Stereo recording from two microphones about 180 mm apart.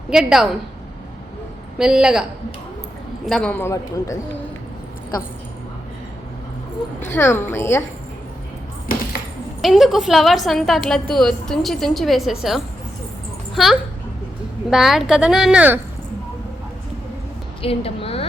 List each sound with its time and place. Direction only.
0.1 s a woman's voice: 5° right (ahead or behind)
1.8 s a woman's voice: 5° right (ahead or behind)
3.2 s a man's voice: 5° left (ahead or behind)
7.1 s a man's voice: 10° left (ahead or behind)
9.6 s a woman's voice: centre (ahead or behind)
17.6 s a woman's voice: 30° left (ahead or behind)